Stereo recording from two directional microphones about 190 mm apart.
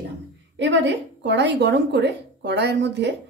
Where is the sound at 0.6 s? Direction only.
70° right (ahead or behind).